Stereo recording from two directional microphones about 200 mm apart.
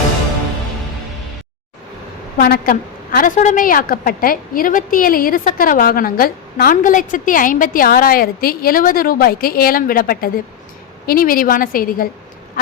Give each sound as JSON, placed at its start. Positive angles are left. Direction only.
{"t": 2.4, "sound": "a woman's voice", "side_deg": 50}